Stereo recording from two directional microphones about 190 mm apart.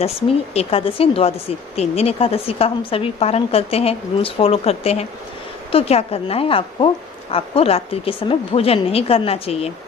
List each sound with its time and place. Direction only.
0.0 s speech: 30° left (ahead or behind)